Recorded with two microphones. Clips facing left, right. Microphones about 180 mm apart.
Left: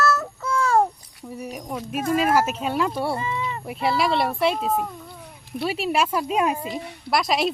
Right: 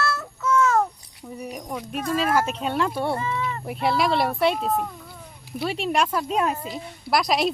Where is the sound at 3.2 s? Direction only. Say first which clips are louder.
Even; 15° left (ahead or behind).